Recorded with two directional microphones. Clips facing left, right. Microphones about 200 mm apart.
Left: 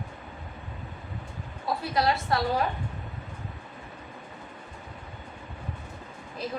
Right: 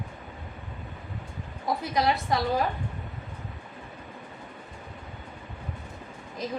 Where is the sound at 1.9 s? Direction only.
15° right (ahead or behind).